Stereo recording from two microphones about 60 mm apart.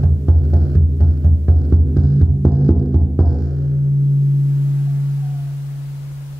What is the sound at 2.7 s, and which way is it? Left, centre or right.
Music, centre.